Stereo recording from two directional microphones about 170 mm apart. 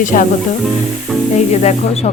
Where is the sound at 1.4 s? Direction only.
40° left (ahead or behind).